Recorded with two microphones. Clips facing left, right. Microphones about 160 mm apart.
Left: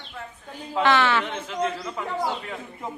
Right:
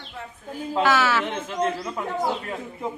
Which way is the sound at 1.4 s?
50° right (ahead or behind).